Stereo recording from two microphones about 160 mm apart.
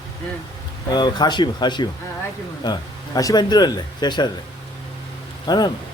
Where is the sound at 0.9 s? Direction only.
25° left (ahead or behind).